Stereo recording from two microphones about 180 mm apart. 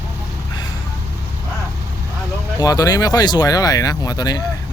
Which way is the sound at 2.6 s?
20° left (ahead or behind).